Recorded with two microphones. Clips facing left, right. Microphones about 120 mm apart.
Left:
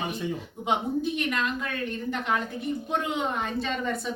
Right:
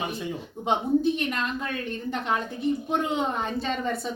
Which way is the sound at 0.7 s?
30° right (ahead or behind).